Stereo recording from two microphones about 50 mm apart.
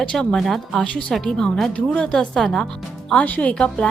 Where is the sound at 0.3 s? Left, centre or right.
Centre.